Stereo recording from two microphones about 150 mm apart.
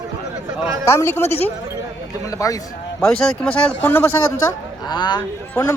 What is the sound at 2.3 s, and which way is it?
Speech, 20° left (ahead or behind).